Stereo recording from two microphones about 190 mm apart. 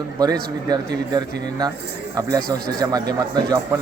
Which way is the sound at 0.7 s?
20° right (ahead or behind).